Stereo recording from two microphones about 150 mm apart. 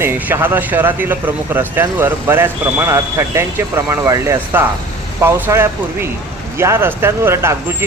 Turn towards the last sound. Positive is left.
turn(degrees=-15)  # may be behind; listen again after turning